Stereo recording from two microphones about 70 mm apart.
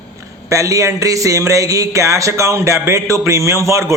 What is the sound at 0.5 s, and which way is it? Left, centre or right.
A man's voice, right.